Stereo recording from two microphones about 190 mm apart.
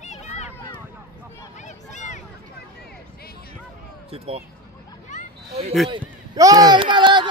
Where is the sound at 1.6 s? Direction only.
40° left (ahead or behind).